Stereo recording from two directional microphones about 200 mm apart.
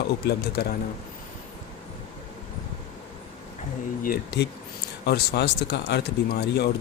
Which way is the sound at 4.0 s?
45° left (ahead or behind).